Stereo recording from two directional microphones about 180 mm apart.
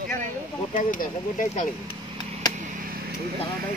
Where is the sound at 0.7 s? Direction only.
45° left (ahead or behind).